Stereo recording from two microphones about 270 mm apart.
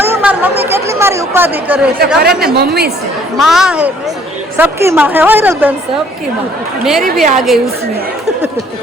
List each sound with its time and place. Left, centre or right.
0.0 s chatter: centre
2.4 s a woman's voice: right
3.3 s a woman's voice: centre
6.8 s a woman's voice: centre